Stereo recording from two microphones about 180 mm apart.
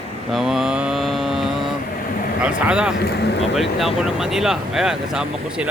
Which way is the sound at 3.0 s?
65° left (ahead or behind).